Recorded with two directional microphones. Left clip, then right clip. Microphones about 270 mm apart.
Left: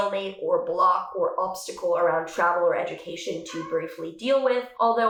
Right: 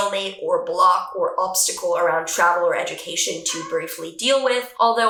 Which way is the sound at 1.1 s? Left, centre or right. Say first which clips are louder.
Right 4 dB; centre.